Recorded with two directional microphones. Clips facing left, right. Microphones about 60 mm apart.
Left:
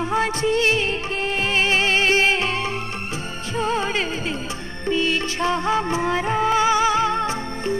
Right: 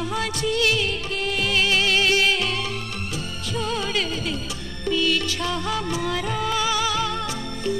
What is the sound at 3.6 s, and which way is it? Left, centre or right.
Music, left.